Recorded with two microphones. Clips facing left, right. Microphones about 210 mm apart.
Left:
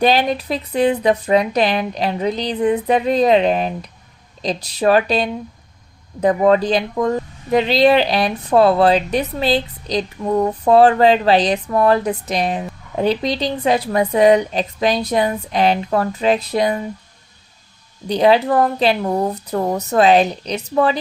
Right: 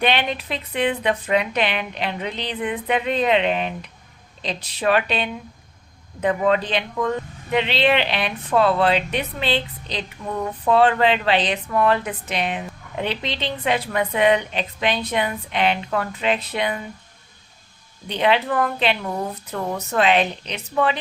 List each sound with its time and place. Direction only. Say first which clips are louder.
0.0 s speech: left 6 dB; 40° left (ahead or behind)
18.1 s speech: left 6 dB; 40° left (ahead or behind)